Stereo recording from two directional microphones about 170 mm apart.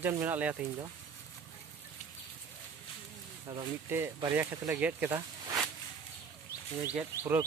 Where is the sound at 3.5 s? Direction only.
20° right (ahead or behind).